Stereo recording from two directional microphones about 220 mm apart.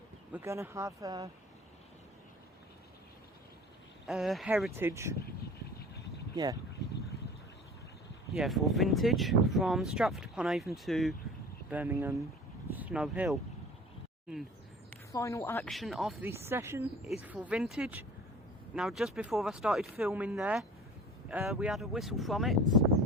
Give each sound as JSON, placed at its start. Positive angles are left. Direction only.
{"t": 0.3, "sound": "speech", "side_deg": -10}
{"t": 4.0, "sound": "speech", "side_deg": 0}
{"t": 6.3, "sound": "speech", "side_deg": -15}
{"t": 8.3, "sound": "speech", "side_deg": 0}
{"t": 15.1, "sound": "a woman's voice", "side_deg": 15}
{"t": 15.7, "sound": "speech", "side_deg": 0}